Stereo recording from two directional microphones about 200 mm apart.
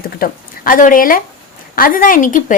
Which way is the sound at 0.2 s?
45° left (ahead or behind).